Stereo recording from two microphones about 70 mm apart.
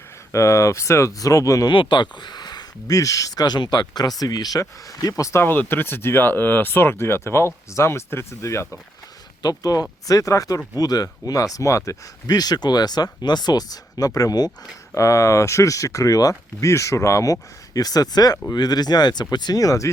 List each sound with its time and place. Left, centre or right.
0.3 s speech: left
5.3 s speech: left
9.4 s speech: left
10.1 s speech: left
10.8 s speech: left
12.3 s speech: left
14.9 s speech: left
16.6 s speech: left
17.7 s speech: left